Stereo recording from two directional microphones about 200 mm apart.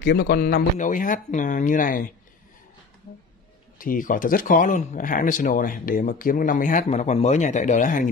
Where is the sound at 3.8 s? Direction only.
45° left (ahead or behind).